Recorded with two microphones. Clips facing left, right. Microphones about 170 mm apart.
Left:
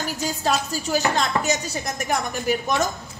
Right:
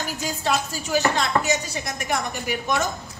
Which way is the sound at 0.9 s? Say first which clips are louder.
Right 1 dB; 40° left (ahead or behind).